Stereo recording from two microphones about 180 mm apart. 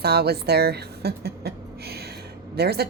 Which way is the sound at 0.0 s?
65° right (ahead or behind).